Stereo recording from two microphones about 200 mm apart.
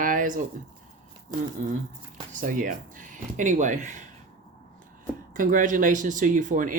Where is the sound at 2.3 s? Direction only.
40° right (ahead or behind).